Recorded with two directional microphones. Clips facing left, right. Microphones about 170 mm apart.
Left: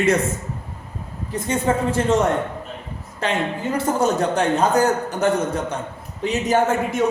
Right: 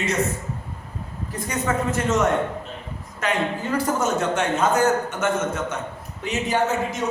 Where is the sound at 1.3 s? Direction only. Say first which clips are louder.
Left 4 dB; 30° left (ahead or behind); by 7.0 s 45° left (ahead or behind).